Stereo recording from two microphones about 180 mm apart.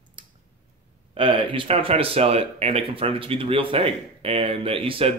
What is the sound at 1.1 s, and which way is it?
Speech, 30° right (ahead or behind).